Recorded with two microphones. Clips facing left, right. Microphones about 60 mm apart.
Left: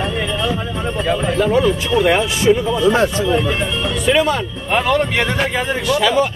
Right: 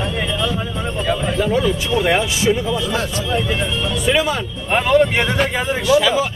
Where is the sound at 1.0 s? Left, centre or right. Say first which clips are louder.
Left 2 dB; left.